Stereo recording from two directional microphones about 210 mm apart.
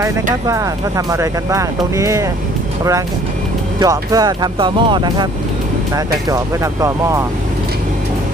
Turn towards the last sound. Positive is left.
turn(degrees=-15)  # may be behind; listen again after turning